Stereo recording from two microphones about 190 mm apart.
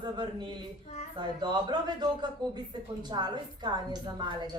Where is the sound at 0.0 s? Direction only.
25° right (ahead or behind).